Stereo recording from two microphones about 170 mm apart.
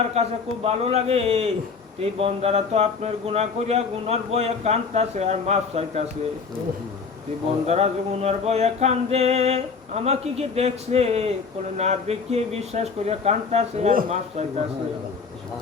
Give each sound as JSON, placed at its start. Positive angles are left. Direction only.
{"t": 0.1, "sound": "a man's voice", "side_deg": -40}
{"t": 7.7, "sound": "a man's voice", "side_deg": -40}